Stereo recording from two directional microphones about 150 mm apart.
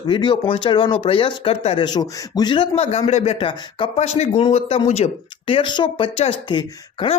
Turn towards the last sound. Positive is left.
turn(degrees=35)  # may be behind; listen again after turning